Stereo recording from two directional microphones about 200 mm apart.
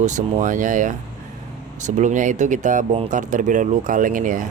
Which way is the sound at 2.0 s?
40° right (ahead or behind).